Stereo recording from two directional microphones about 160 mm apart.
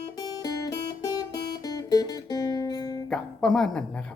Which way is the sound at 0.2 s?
25° left (ahead or behind).